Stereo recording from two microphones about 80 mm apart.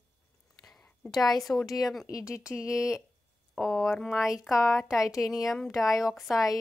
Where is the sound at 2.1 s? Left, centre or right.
Left.